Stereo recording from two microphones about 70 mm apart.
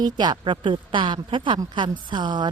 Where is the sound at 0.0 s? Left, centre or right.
Right.